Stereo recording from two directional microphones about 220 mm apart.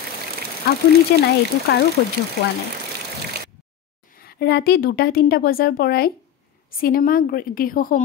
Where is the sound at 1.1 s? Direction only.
45° left (ahead or behind).